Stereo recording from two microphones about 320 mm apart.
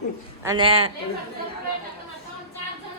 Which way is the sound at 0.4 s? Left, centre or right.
Centre.